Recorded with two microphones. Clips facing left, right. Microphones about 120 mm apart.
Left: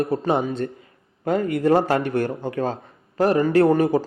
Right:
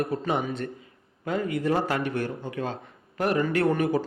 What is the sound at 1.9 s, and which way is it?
A man's voice, 35° left (ahead or behind).